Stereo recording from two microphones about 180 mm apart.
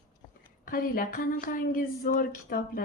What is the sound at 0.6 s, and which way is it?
Speech, 50° left (ahead or behind).